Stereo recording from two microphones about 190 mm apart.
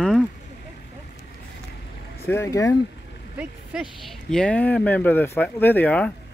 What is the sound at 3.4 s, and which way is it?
Speech, centre (ahead or behind).